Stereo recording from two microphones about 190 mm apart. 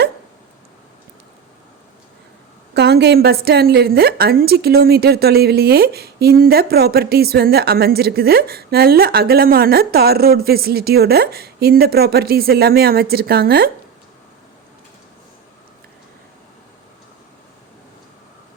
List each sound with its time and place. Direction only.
2.7 s a woman's voice: 60° right (ahead or behind)